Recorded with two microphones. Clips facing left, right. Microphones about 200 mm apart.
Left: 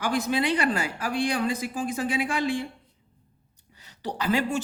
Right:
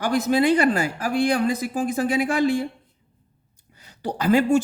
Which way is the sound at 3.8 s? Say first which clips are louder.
Right 6 dB; 40° right (ahead or behind).